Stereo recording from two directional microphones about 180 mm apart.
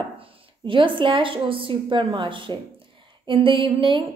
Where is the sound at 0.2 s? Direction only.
30° right (ahead or behind).